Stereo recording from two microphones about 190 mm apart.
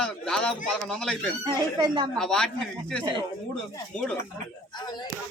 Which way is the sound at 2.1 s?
5° left (ahead or behind).